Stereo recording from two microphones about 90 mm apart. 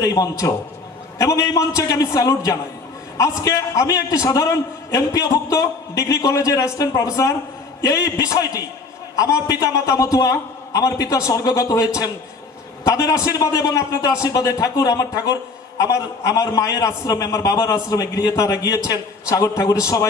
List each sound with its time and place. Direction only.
0.0 s a man's voice: 40° left (ahead or behind)